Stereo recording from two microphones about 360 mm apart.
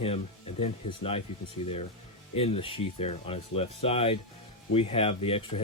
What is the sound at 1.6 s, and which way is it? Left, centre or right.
Speech, centre.